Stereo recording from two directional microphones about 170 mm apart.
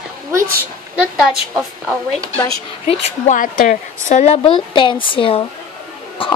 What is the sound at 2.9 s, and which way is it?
Speech, 40° left (ahead or behind).